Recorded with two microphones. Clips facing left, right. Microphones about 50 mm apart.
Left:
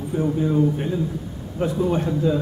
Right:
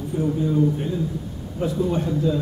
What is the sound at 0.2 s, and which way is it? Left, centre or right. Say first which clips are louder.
A man's voice: left 1 dB; left.